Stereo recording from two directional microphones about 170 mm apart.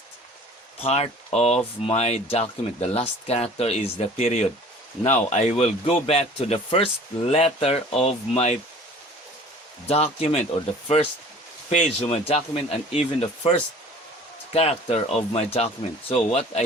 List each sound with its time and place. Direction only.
0.8 s speech: 35° left (ahead or behind)
9.8 s speech: 35° left (ahead or behind)
14.5 s speech: 35° left (ahead or behind)